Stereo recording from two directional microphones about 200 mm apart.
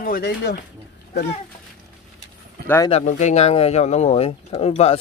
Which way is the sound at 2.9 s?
35° left (ahead or behind).